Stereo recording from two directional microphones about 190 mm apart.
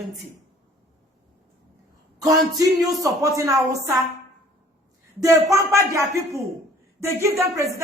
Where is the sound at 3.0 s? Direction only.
15° right (ahead or behind).